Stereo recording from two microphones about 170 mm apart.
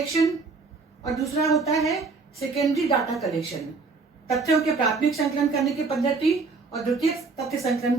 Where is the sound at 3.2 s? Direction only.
Centre (ahead or behind).